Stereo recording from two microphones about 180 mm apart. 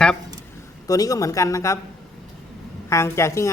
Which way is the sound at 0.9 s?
20° left (ahead or behind).